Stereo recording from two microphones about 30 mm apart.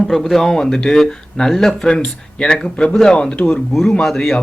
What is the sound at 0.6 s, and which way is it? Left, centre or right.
Speech, left.